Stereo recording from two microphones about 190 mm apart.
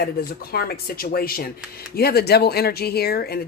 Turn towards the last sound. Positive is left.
turn(degrees=55)  # may be behind; listen again after turning